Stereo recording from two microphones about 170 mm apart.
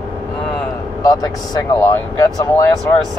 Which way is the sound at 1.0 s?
20° left (ahead or behind).